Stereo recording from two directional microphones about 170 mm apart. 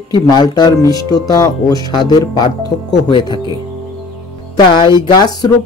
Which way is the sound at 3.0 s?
25° left (ahead or behind).